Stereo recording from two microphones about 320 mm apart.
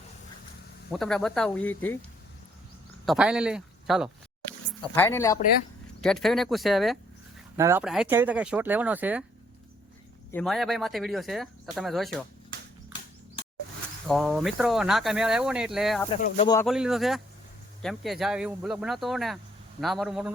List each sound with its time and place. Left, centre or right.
0.9 s speech: centre
3.1 s speech: centre
10.3 s speech: centre
14.1 s speech: centre
16.0 s speech: left
16.6 s speech: centre